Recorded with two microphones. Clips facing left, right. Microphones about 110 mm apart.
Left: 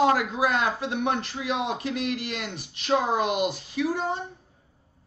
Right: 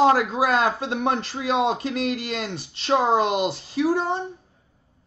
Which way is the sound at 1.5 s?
90° right.